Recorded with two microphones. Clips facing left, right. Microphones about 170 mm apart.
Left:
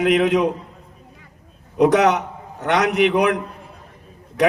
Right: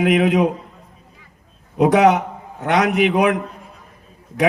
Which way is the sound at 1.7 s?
55° right (ahead or behind).